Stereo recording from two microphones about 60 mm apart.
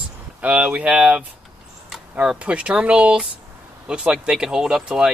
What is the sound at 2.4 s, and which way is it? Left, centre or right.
Speech, centre.